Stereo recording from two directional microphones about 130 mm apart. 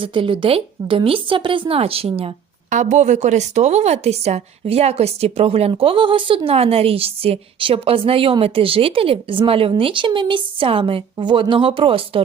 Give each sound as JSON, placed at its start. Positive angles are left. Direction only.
{"t": 0.0, "sound": "a woman's voice", "side_deg": -40}
{"t": 2.6, "sound": "a woman's voice", "side_deg": -65}